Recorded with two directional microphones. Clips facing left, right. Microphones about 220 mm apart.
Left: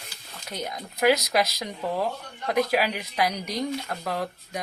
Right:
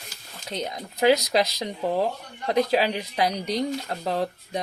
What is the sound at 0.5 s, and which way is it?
Speech, 30° right (ahead or behind).